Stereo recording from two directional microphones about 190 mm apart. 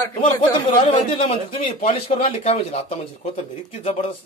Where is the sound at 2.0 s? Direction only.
30° left (ahead or behind).